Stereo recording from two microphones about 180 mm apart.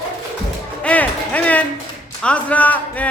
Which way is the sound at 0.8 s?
10° left (ahead or behind).